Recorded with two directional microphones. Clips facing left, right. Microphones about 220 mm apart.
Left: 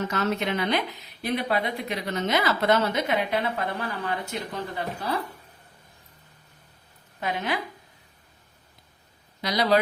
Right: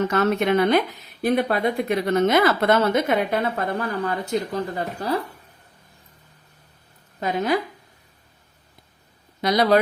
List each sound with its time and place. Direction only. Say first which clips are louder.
0.1 s speech: right 7 dB; 55° right (ahead or behind)
7.2 s speech: right 7 dB; 40° right (ahead or behind)
9.4 s speech: right 6 dB; 50° right (ahead or behind)